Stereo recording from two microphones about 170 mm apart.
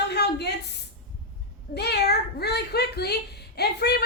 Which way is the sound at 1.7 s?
75° left (ahead or behind).